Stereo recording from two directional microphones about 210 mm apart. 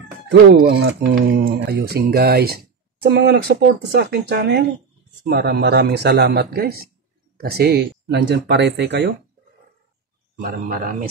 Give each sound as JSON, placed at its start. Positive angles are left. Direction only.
{"t": 0.3, "sound": "speech", "side_deg": -50}
{"t": 10.4, "sound": "speech", "side_deg": -40}